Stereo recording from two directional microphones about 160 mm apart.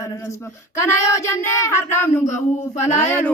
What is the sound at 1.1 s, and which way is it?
Speech, 20° left (ahead or behind).